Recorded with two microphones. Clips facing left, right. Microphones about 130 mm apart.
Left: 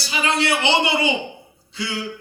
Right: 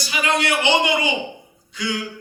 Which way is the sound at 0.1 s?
30° left (ahead or behind).